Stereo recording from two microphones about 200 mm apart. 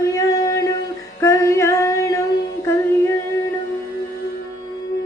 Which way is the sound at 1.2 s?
15° left (ahead or behind).